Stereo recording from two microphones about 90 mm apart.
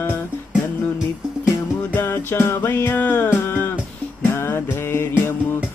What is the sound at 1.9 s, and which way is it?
Music, 25° left (ahead or behind).